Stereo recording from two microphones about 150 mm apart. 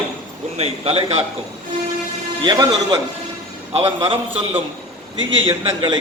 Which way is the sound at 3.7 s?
35° right (ahead or behind).